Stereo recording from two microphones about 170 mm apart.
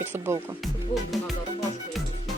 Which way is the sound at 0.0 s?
15° right (ahead or behind).